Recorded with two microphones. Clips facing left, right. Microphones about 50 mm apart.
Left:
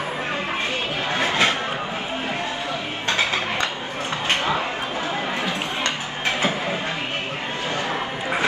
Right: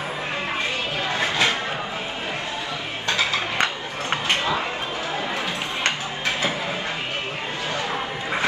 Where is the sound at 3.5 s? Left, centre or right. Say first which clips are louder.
Right 1 dB; right.